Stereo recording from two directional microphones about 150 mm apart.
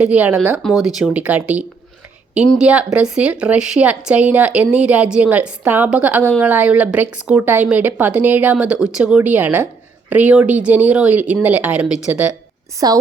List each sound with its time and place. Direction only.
0.0 s speech: 10° right (ahead or behind)
12.8 s a woman's voice: 25° right (ahead or behind)